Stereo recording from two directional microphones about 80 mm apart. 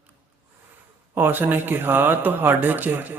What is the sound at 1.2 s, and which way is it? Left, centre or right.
Speech, right.